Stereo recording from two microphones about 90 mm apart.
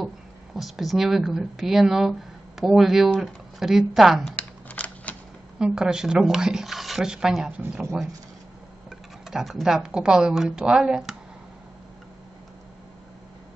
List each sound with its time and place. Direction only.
0.6 s a woman's voice: centre (ahead or behind)
4.4 s computer keyboard: 15° left (ahead or behind)
5.6 s speech: 5° right (ahead or behind)
9.3 s speech: 5° right (ahead or behind)